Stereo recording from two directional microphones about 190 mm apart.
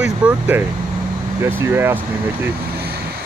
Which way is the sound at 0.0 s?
5° right (ahead or behind).